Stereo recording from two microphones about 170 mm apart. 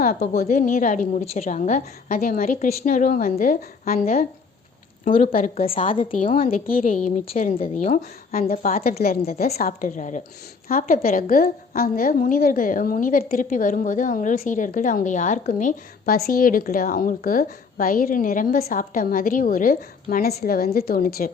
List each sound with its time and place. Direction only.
0.0 s a woman's voice: 60° left (ahead or behind)
5.5 s a woman's voice: 35° left (ahead or behind)
6.2 s a woman's voice: 55° left (ahead or behind)
7.9 s a woman's voice: 55° left (ahead or behind)